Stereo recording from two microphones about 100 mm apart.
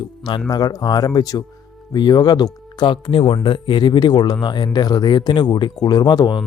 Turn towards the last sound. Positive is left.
turn(degrees=45)  # may be behind; listen again after turning